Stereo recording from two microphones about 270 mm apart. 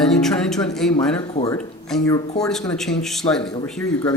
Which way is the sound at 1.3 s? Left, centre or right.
Left.